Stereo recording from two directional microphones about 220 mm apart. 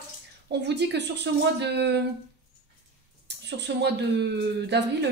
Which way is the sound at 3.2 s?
50° right (ahead or behind).